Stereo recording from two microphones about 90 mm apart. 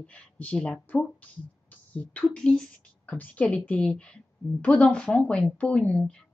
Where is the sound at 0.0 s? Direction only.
15° left (ahead or behind).